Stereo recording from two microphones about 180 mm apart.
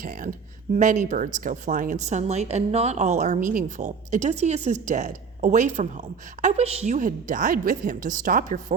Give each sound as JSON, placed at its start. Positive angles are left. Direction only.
{"t": 0.0, "sound": "a woman's voice", "side_deg": -50}